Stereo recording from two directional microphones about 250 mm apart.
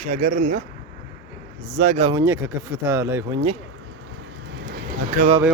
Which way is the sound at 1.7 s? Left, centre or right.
Right.